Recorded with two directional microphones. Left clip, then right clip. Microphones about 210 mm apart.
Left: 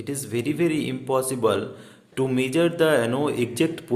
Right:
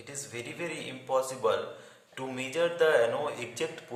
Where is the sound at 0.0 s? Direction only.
45° left (ahead or behind).